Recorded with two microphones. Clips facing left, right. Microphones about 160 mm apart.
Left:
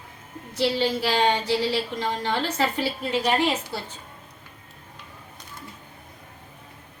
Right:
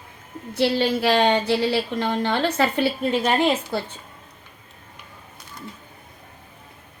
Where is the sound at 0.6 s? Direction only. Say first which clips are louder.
Right 3 dB; 60° right (ahead or behind).